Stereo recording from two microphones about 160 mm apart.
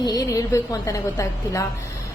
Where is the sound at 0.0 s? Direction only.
25° left (ahead or behind).